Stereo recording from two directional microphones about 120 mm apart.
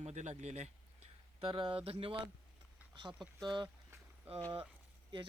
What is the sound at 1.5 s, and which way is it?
Speech, 45° right (ahead or behind).